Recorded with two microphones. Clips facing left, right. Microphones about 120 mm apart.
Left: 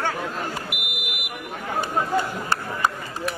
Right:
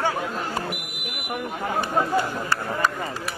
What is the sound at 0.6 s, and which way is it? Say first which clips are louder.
Buzzer: right 2 dB; 40° right (ahead or behind).